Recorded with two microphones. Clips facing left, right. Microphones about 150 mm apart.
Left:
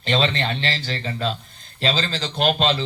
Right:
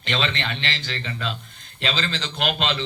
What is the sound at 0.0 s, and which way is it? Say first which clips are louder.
A man's voice: left 5 dB; 35° left (ahead or behind).